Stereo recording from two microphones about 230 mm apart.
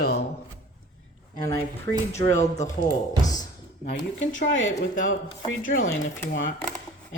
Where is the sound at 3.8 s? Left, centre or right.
Left.